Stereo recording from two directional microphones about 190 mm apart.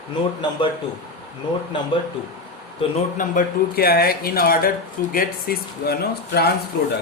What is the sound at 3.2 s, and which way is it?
A man's voice, 50° left (ahead or behind).